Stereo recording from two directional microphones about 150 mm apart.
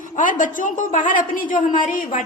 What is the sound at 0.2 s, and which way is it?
A woman's voice, 60° left (ahead or behind).